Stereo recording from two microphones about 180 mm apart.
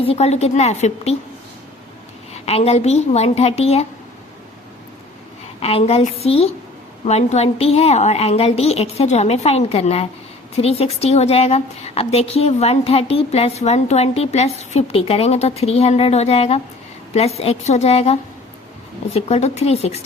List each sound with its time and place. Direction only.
0.0 s a woman's voice: 35° left (ahead or behind)
2.3 s a woman's voice: 35° left (ahead or behind)
5.6 s a woman's voice: 35° left (ahead or behind)